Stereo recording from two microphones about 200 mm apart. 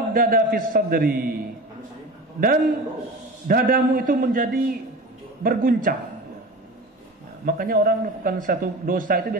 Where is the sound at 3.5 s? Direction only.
45° right (ahead or behind).